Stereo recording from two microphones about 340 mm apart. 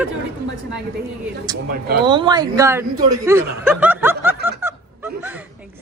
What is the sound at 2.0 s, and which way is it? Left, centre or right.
Speech, centre.